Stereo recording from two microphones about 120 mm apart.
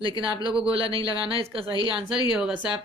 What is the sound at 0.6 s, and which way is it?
Speech, 50° right (ahead or behind).